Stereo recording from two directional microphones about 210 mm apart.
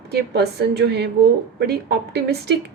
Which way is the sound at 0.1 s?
50° right (ahead or behind).